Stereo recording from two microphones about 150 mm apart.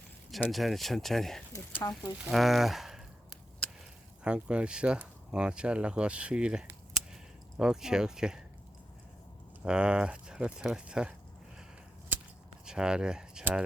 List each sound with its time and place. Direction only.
0.5 s speech: centre (ahead or behind)
1.5 s speech: 20° left (ahead or behind)
2.2 s speech: centre (ahead or behind)
4.2 s speech: 5° right (ahead or behind)
9.6 s speech: 5° right (ahead or behind)
12.6 s speech: 5° right (ahead or behind)